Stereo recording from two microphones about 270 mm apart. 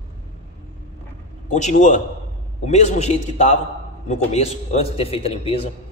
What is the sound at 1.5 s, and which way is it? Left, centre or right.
A man's voice, left.